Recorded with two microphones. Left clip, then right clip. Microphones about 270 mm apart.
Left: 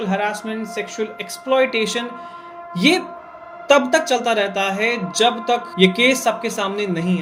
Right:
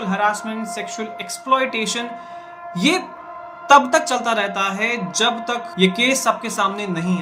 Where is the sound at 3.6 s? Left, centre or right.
Centre.